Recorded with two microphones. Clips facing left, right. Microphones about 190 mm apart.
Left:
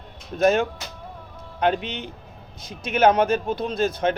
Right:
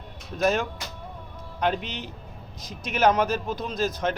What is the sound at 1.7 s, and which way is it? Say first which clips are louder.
A man's voice: left 3 dB; centre (ahead or behind).